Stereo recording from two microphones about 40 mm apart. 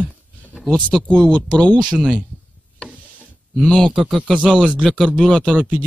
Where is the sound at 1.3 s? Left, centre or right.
Left.